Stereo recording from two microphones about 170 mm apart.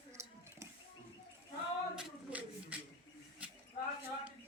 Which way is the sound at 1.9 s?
5° right (ahead or behind).